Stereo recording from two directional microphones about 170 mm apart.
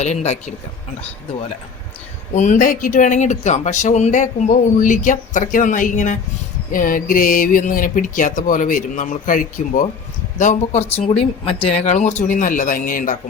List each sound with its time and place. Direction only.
0.0 s speech: 40° left (ahead or behind)
2.3 s speech: 45° left (ahead or behind)